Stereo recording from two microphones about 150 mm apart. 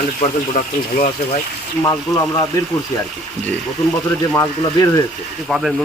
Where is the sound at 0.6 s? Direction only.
65° left (ahead or behind).